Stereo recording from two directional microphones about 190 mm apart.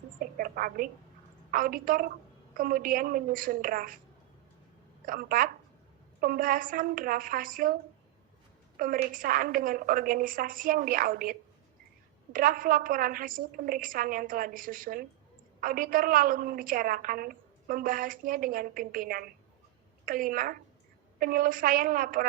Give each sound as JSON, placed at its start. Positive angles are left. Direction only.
{"t": 0.2, "sound": "a sound", "side_deg": -50}
{"t": 1.5, "sound": "a woman's voice", "side_deg": -50}
{"t": 5.0, "sound": "a woman's voice", "side_deg": -45}
{"t": 8.8, "sound": "a woman's voice", "side_deg": -45}